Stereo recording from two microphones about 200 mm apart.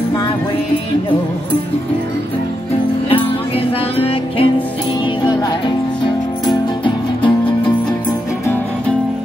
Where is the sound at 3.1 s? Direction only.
30° left (ahead or behind).